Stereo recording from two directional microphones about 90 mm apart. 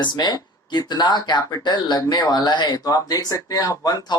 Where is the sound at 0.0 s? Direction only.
55° left (ahead or behind).